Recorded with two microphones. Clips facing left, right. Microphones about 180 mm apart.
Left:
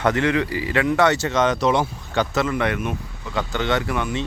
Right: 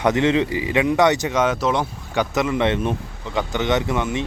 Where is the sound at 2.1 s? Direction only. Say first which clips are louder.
Right 1 dB; 15° right (ahead or behind).